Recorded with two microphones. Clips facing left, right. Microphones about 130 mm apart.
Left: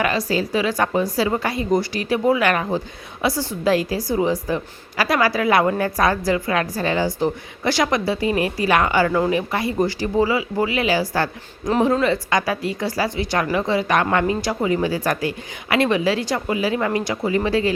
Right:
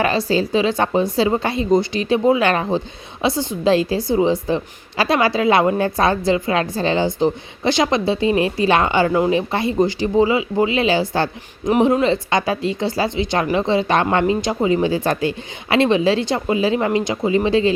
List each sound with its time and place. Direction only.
0.0 s speech: 30° right (ahead or behind)